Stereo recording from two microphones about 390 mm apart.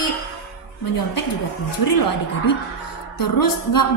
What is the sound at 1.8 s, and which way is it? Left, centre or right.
Speech, left.